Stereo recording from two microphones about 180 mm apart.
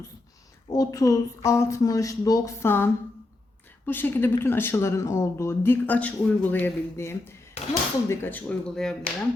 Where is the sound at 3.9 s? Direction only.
10° left (ahead or behind).